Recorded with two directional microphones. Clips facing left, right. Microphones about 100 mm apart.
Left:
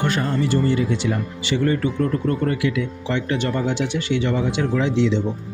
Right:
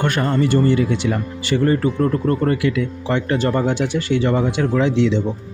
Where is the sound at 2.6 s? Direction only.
50° right (ahead or behind).